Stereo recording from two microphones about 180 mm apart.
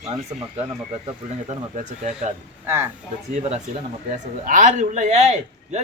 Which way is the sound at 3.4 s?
35° right (ahead or behind).